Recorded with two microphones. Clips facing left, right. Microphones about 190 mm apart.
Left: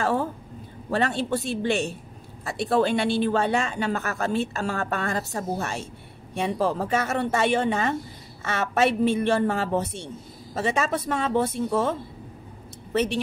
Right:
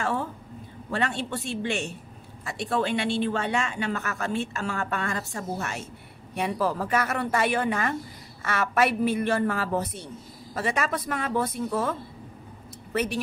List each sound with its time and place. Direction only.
0.0 s a woman's voice: 40° left (ahead or behind)